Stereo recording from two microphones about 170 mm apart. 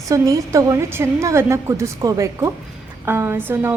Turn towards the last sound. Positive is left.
turn(degrees=-10)  # may be behind; listen again after turning